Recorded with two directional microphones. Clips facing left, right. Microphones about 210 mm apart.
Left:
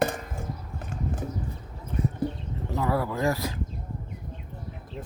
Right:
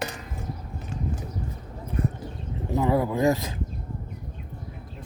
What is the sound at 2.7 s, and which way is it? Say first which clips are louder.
Speech: right 4 dB; 20° right (ahead or behind).